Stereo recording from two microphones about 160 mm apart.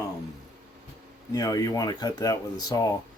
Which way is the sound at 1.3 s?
25° left (ahead or behind).